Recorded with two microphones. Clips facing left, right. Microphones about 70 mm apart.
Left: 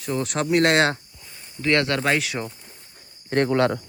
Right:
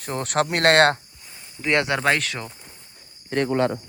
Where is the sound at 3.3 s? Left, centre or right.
Left.